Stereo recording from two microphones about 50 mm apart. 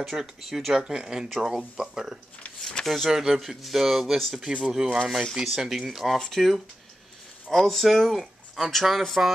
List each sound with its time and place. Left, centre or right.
0.0 s speech: centre
4.5 s speech: centre
5.3 s speech: centre
6.1 s speech: centre